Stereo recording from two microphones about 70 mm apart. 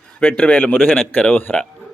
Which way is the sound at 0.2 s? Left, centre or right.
Centre.